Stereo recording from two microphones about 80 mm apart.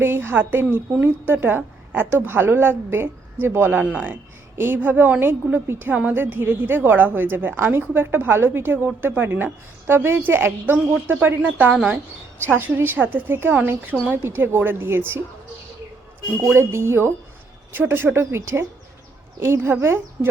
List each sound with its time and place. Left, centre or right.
0.0 s a woman's voice: right
16.6 s speech: right